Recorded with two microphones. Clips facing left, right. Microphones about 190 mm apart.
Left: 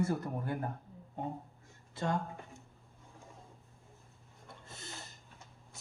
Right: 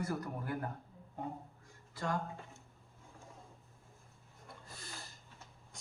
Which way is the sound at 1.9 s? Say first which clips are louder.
Left 3 dB; 25° left (ahead or behind).